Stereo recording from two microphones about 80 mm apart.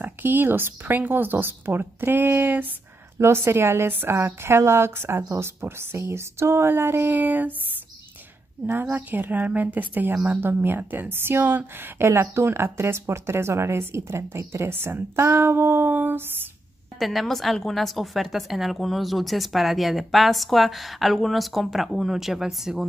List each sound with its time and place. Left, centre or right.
0.0 s a woman's voice: right
3.2 s a woman's voice: right
8.9 s a woman's voice: right
17.0 s a woman's voice: centre